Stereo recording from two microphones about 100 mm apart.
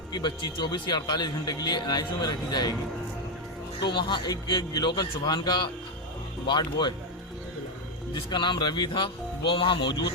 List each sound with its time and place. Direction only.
0.1 s speech: 45° left (ahead or behind)
3.8 s speech: 50° left (ahead or behind)
8.1 s speech: 50° left (ahead or behind)